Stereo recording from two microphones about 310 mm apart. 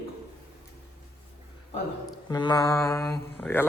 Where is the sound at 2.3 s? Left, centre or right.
Centre.